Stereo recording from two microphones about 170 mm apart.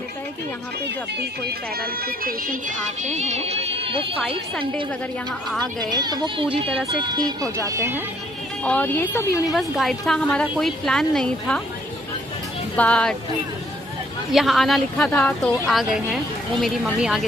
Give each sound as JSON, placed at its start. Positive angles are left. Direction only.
{"t": 1.8, "sound": "music", "side_deg": -60}
{"t": 5.5, "sound": "speech", "side_deg": 0}
{"t": 5.9, "sound": "music", "side_deg": -25}
{"t": 7.0, "sound": "speech", "side_deg": -25}
{"t": 8.6, "sound": "speech", "side_deg": 10}
{"t": 9.5, "sound": "speech", "side_deg": 0}
{"t": 12.7, "sound": "speech", "side_deg": 5}
{"t": 14.3, "sound": "speech", "side_deg": 0}